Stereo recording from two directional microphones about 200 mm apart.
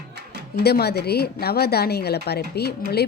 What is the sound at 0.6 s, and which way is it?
A woman's voice, 50° left (ahead or behind).